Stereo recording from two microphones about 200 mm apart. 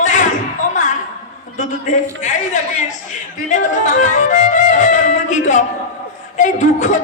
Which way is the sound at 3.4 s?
40° left (ahead or behind).